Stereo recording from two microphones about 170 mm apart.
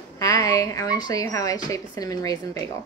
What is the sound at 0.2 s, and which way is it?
Speech, 20° left (ahead or behind).